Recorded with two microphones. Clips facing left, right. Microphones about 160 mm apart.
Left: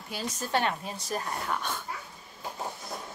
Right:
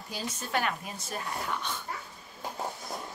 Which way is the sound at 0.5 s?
30° left (ahead or behind).